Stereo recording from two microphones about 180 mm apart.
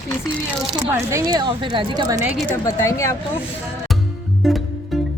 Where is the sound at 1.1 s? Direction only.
25° right (ahead or behind).